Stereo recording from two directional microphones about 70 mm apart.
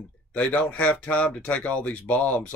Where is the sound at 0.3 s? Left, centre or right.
Centre.